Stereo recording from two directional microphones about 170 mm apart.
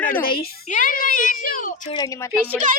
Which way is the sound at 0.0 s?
60° left (ahead or behind).